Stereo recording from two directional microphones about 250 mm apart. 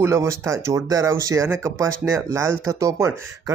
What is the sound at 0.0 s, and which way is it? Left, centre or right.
Speech, centre.